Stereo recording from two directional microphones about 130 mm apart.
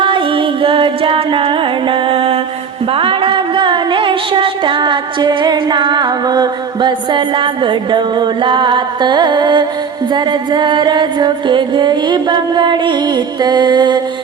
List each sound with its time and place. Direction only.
0.0 s music: 40° right (ahead or behind)